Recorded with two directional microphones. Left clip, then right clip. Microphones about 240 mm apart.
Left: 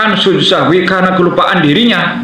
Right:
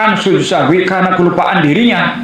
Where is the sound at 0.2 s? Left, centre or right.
Centre.